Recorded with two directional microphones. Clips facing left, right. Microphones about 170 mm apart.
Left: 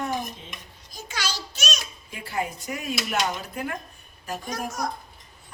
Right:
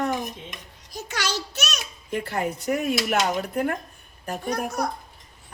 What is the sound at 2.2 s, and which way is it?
Speech, 60° right (ahead or behind).